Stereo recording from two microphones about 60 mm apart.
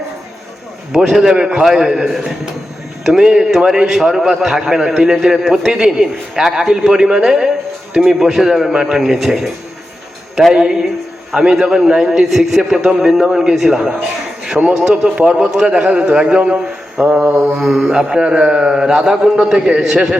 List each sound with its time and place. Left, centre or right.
0.9 s a man's voice: centre
10.5 s a man's voice: centre
17.1 s mantra: right
17.6 s a man's voice: centre